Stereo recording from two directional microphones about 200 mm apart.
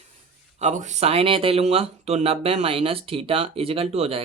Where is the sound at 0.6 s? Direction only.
35° right (ahead or behind).